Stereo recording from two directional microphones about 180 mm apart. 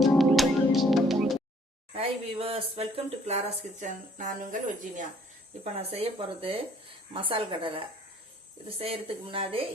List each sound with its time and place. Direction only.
0.0 s music: centre (ahead or behind)
2.0 s speech: 30° right (ahead or behind)